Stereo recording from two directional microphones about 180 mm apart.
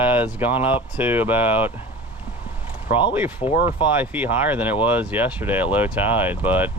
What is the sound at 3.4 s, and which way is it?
Speech, 30° left (ahead or behind).